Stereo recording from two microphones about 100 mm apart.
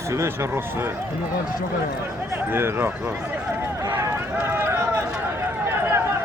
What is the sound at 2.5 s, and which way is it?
Speech, 20° right (ahead or behind).